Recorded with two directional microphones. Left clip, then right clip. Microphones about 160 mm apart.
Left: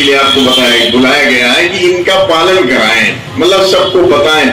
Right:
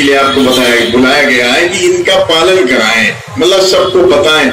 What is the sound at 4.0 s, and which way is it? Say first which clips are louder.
Speech: right 1 dB; 20° left (ahead or behind).